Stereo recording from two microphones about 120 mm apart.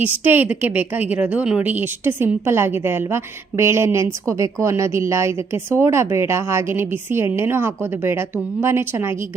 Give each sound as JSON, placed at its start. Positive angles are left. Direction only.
{"t": 0.0, "sound": "a woman's voice", "side_deg": -15}